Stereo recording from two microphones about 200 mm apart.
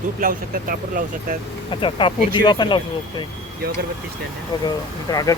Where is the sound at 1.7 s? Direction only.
25° left (ahead or behind).